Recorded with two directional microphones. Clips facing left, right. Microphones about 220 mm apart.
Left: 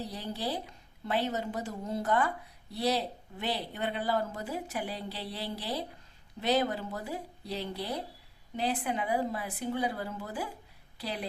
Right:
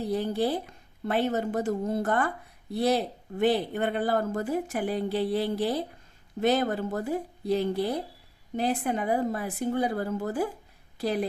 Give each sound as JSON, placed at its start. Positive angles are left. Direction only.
{"t": 0.0, "sound": "a woman's voice", "side_deg": -50}